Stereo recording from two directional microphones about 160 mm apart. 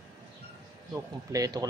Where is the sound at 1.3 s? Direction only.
20° right (ahead or behind).